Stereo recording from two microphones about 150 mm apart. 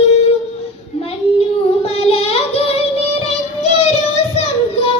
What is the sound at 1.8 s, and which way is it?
Child singing, 40° left (ahead or behind).